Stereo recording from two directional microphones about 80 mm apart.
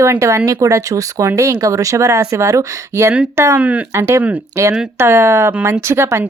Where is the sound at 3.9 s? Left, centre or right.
Right.